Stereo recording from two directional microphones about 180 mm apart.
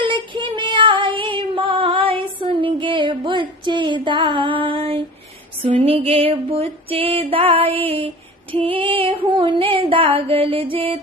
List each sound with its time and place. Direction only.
0.0 s child singing: 25° right (ahead or behind)
2.5 s a sound: 30° right (ahead or behind)
5.6 s music: 30° right (ahead or behind)
7.8 s female singing: 30° right (ahead or behind)